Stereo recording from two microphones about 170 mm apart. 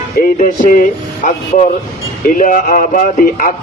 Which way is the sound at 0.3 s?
50° left (ahead or behind).